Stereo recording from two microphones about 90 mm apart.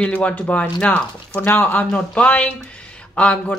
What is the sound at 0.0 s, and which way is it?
A woman's voice, 15° left (ahead or behind).